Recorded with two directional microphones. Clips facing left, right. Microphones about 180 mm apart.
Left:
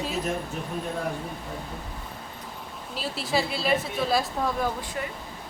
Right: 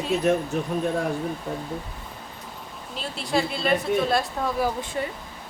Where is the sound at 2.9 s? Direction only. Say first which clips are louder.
Right 2 dB; 5° left (ahead or behind).